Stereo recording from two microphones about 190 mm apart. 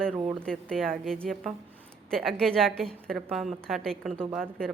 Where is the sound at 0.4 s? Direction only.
5° left (ahead or behind).